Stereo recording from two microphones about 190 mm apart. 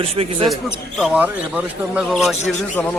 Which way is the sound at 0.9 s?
5° right (ahead or behind).